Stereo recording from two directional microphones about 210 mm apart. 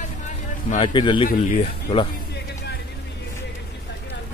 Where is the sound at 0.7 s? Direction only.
25° left (ahead or behind).